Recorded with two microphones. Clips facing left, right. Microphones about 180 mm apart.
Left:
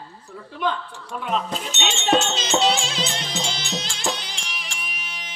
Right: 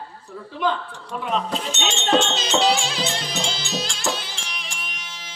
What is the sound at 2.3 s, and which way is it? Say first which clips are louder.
Music: right 1 dB; 25° left (ahead or behind).